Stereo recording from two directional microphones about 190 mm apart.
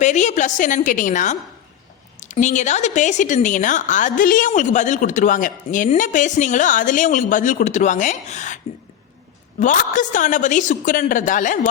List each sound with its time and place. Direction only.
0.0 s a woman's voice: 40° left (ahead or behind)